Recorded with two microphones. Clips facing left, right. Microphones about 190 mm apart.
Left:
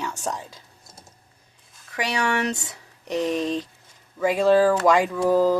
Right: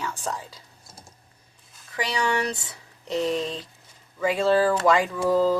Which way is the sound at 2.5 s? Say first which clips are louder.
Left 4 dB; 20° left (ahead or behind).